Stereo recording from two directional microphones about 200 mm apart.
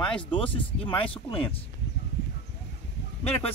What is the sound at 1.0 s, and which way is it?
Speech, 25° left (ahead or behind).